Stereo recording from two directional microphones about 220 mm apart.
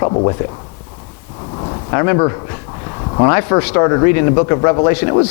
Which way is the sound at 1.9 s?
20° left (ahead or behind).